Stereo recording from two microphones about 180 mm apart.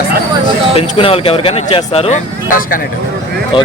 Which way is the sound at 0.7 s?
30° left (ahead or behind).